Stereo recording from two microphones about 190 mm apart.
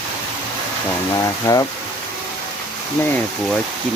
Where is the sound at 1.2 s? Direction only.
20° left (ahead or behind).